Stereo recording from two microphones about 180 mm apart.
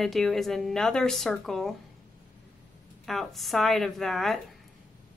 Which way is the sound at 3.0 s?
Centre (ahead or behind).